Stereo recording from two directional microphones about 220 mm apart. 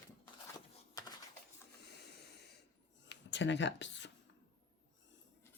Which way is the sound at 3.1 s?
55° left (ahead or behind).